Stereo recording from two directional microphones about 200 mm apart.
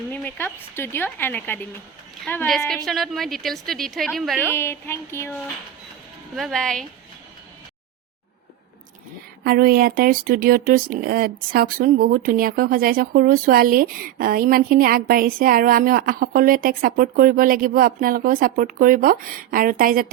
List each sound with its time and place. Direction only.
0.1 s a woman's voice: 10° left (ahead or behind)
4.4 s speech: 10° left (ahead or behind)
6.3 s a woman's voice: centre (ahead or behind)
9.4 s speech: 50° right (ahead or behind)